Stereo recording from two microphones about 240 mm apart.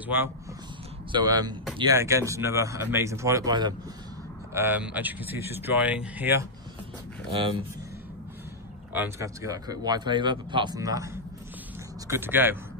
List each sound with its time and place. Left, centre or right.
0.0 s speech: centre
8.9 s speech: centre
12.1 s speech: centre